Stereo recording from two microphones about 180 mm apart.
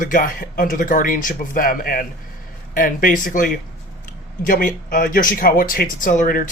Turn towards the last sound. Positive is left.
turn(degrees=45)  # may be behind; listen again after turning